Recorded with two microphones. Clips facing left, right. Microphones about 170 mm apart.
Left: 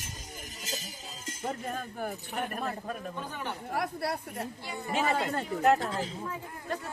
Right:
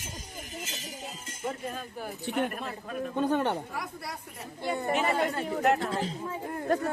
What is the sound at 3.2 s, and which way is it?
Speech, 70° right (ahead or behind).